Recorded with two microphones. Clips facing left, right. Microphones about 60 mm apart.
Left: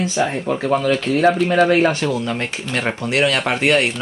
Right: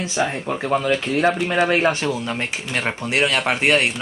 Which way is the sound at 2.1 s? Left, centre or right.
Centre.